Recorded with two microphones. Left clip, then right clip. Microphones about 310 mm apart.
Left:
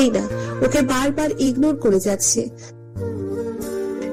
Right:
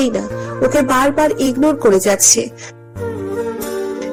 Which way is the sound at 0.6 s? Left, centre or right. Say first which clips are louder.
Right 6 dB; centre.